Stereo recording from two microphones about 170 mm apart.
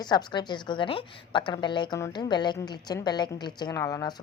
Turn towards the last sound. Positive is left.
turn(degrees=20)  # may be behind; listen again after turning